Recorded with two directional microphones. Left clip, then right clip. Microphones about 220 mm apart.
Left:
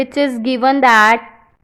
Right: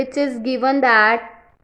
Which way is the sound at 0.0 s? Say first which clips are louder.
Left 4 dB; 25° left (ahead or behind).